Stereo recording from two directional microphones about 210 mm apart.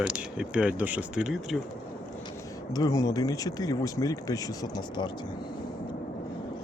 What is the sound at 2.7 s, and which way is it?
Speech, 15° left (ahead or behind).